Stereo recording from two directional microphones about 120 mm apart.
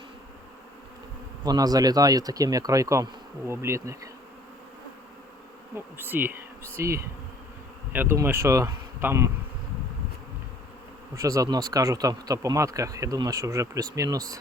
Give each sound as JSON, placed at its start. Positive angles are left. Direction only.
{"t": 1.5, "sound": "speech", "side_deg": -30}
{"t": 5.7, "sound": "bee", "side_deg": -15}
{"t": 7.9, "sound": "speech", "side_deg": -20}
{"t": 11.1, "sound": "speech", "side_deg": -25}